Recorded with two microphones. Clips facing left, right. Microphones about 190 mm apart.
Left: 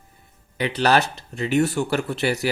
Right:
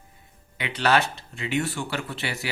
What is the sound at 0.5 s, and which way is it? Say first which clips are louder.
Speech: left 3 dB; 40° left (ahead or behind).